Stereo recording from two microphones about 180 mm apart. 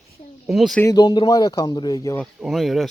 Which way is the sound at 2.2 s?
Centre (ahead or behind).